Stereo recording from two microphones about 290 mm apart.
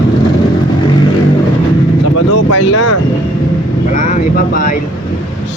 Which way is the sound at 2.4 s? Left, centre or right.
Left.